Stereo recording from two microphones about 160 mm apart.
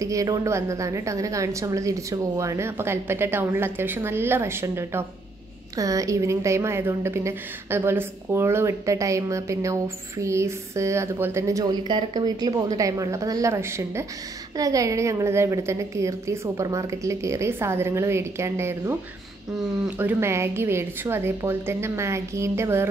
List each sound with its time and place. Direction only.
0.0 s a woman's voice: 20° right (ahead or behind)
20.0 s a woman's voice: 15° right (ahead or behind)